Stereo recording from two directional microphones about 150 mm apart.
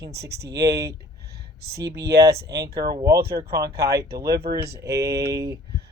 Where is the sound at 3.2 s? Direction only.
90° right.